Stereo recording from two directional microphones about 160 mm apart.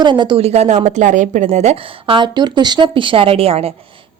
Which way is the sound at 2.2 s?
25° right (ahead or behind).